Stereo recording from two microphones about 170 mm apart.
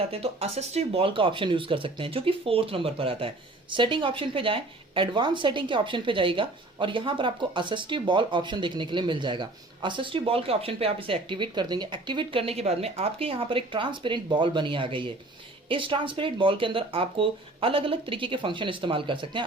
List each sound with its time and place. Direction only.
0.1 s speech: 35° right (ahead or behind)